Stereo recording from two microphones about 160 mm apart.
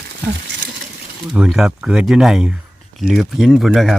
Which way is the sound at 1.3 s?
5° right (ahead or behind).